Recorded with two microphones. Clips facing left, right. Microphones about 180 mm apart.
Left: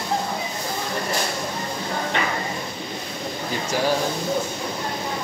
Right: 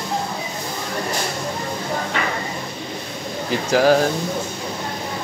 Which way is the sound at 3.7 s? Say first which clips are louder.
Right 8 dB; 90° right.